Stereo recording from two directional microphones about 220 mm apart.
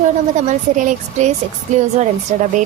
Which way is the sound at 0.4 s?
35° right (ahead or behind).